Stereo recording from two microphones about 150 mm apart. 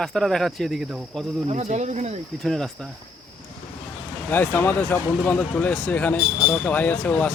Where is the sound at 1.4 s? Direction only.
50° right (ahead or behind).